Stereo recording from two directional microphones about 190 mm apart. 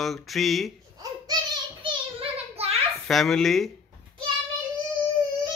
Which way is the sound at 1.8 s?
30° right (ahead or behind).